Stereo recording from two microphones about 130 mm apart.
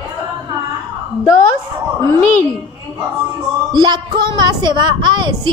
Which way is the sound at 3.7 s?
35° right (ahead or behind).